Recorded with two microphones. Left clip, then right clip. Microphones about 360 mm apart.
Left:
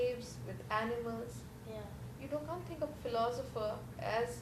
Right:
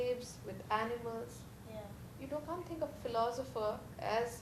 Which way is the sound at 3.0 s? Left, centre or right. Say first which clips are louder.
Even; centre.